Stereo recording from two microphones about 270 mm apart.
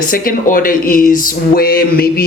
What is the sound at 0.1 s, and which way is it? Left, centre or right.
Speech, left.